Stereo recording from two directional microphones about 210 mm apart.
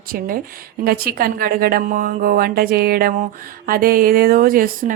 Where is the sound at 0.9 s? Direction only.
45° right (ahead or behind).